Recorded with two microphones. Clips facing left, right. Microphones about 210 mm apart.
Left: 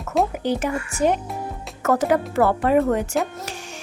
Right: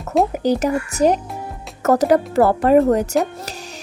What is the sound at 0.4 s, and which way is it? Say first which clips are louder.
Speech: right 5 dB; 40° right (ahead or behind).